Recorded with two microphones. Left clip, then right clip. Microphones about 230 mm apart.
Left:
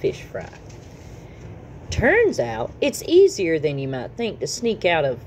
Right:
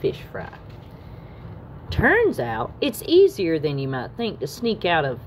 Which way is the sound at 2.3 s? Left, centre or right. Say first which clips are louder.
Left 1 dB; centre.